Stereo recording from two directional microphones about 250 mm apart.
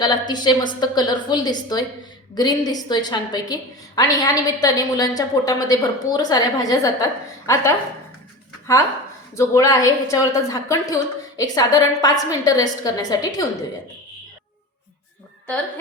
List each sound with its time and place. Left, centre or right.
0.0 s a woman's voice: centre
9.3 s a woman's voice: centre